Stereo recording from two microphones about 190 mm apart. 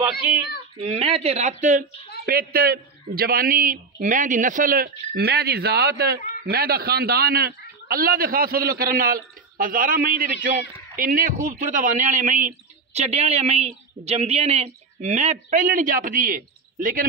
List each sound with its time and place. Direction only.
0.7 s a man's voice: 30° right (ahead or behind)